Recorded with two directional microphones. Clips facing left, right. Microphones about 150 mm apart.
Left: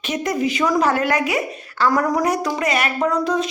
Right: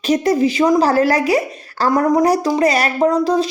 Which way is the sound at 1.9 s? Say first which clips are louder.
Right 8 dB; 25° right (ahead or behind).